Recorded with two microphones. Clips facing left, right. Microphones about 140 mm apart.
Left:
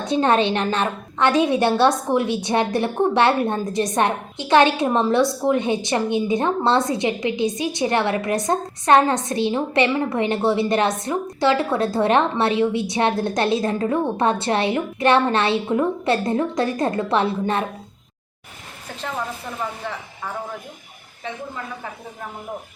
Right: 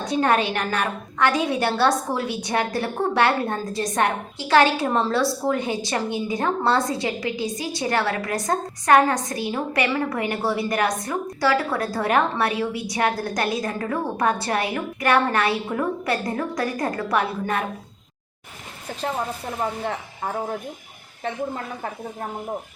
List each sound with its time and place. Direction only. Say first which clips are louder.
0.0 s a woman's voice: left 3 dB; 25° left (ahead or behind)